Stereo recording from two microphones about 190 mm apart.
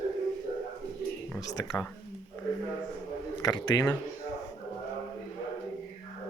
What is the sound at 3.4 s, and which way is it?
Speech, 20° left (ahead or behind).